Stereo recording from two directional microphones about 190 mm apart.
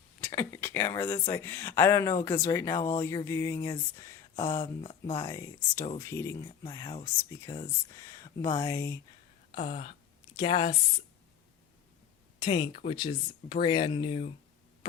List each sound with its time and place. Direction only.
0.2 s a sound: 15° left (ahead or behind)
1.2 s speech: 15° left (ahead or behind)
4.6 s speech: 30° left (ahead or behind)
5.2 s speech: 15° left (ahead or behind)
9.6 s speech: 30° left (ahead or behind)
12.4 s speech: 25° left (ahead or behind)